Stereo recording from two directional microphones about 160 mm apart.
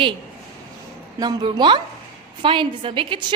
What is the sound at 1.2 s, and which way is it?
A woman's voice, 25° right (ahead or behind).